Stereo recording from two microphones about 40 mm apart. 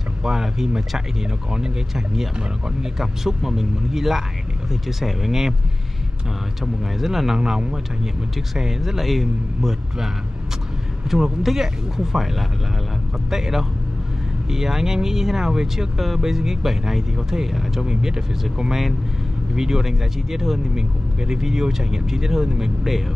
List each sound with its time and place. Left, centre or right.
0.2 s speech: centre
6.6 s speech: centre
11.1 s speech: centre
19.5 s speech: centre